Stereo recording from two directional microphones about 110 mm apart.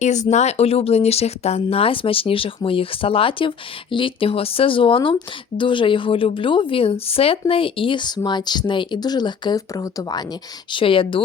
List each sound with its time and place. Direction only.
0.0 s a woman's voice: 90° left; by 10.2 s 35° left (ahead or behind)
10.7 s a woman's voice: 50° left (ahead or behind)